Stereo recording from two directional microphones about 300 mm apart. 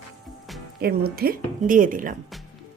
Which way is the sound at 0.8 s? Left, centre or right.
Right.